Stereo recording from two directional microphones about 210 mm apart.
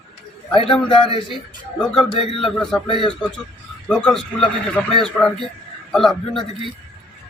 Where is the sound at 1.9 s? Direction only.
25° left (ahead or behind).